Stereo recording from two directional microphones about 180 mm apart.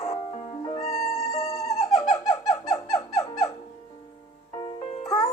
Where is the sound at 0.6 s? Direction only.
25° left (ahead or behind).